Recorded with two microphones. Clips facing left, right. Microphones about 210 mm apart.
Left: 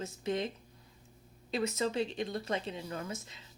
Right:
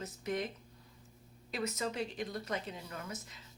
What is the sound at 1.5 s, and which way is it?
Speech, 25° left (ahead or behind).